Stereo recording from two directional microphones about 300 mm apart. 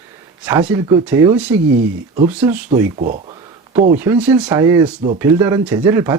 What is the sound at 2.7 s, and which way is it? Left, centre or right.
Speech, right.